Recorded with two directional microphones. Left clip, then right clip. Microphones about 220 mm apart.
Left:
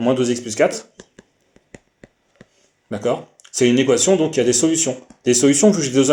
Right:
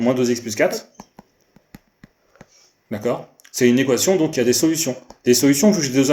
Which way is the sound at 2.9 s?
30° left (ahead or behind).